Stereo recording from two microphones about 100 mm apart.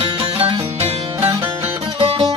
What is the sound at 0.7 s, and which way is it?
Music, 90° right.